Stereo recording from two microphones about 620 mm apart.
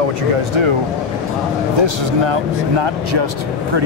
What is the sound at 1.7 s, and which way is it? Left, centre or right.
Speech, right.